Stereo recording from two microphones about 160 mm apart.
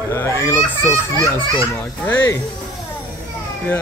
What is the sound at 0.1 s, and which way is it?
Speech, 15° left (ahead or behind).